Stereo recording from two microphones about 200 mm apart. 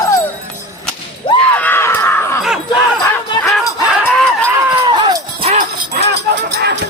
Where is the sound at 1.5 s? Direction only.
10° left (ahead or behind).